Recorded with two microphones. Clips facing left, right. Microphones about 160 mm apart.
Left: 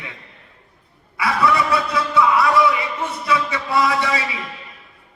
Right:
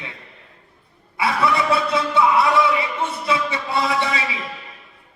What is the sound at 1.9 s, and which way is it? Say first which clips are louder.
Speech: even; 25° right (ahead or behind).